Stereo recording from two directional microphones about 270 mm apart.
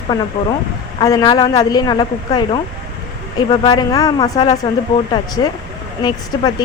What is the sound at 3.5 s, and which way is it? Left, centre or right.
Speech, centre.